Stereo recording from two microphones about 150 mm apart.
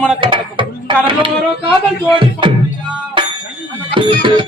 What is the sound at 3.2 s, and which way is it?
Bicycle bell, 30° right (ahead or behind).